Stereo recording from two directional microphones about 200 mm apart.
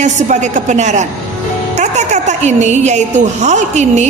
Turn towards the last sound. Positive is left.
turn(degrees=-35)  # may be behind; listen again after turning